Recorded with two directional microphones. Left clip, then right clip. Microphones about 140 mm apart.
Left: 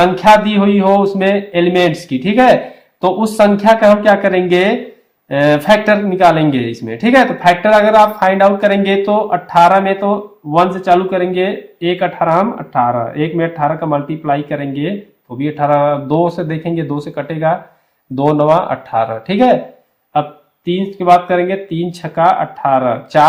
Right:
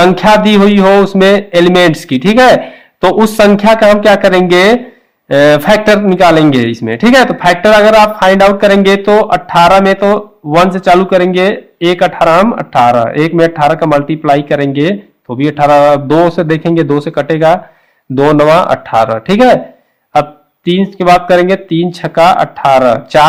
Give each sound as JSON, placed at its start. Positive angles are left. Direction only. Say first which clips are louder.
{"t": 0.0, "sound": "a man's voice", "louder": "right 2 dB", "side_deg": -55}
{"t": 12.3, "sound": "a man's voice", "louder": "right 6 dB", "side_deg": -65}
{"t": 20.7, "sound": "a man's voice", "louder": "right 3 dB", "side_deg": -50}